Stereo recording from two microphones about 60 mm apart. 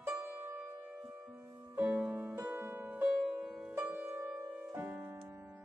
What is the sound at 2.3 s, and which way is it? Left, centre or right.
Music, right.